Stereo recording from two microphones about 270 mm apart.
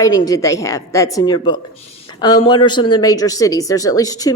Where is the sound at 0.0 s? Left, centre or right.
Centre.